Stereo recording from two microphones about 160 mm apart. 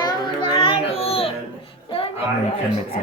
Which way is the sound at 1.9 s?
35° left (ahead or behind).